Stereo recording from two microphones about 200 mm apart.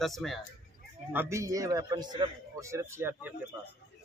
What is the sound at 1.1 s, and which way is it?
A man's voice, 15° right (ahead or behind).